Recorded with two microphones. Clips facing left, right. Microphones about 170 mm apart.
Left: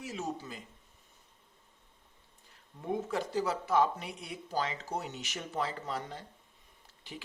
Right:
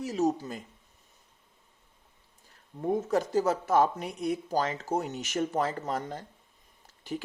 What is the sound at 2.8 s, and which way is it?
A man's voice, 40° right (ahead or behind).